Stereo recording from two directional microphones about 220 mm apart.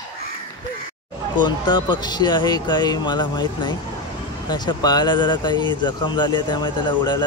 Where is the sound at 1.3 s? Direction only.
20° left (ahead or behind).